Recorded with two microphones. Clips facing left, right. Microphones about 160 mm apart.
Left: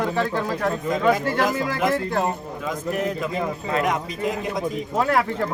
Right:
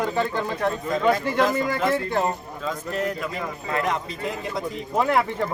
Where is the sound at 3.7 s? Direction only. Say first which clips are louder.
Left 1 dB; 20° left (ahead or behind).